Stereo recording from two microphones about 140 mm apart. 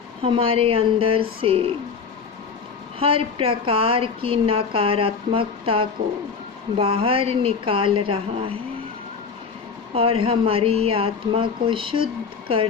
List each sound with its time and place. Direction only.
0.2 s a woman's voice: 40° right (ahead or behind)
3.0 s a woman's voice: 40° right (ahead or behind)
9.9 s a woman's voice: 40° right (ahead or behind)